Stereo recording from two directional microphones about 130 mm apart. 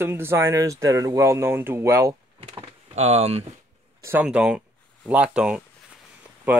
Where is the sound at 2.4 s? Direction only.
55° right (ahead or behind).